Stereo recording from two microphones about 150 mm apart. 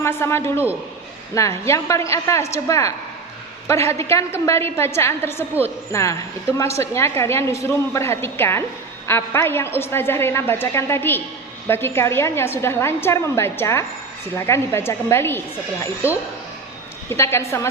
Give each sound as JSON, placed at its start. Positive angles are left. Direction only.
{"t": 0.0, "sound": "a woman's voice", "side_deg": 15}